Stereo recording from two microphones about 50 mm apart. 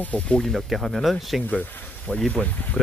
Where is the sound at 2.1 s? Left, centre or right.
Left.